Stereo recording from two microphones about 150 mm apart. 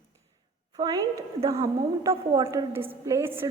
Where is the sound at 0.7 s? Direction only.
25° right (ahead or behind).